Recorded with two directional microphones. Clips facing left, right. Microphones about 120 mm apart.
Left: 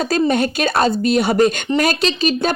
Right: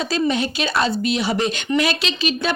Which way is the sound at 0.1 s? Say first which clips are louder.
Left 4 dB; 50° left (ahead or behind).